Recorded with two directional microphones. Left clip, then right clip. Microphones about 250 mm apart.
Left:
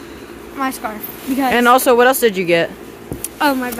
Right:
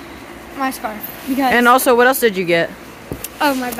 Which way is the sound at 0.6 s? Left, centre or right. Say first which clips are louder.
Even; centre.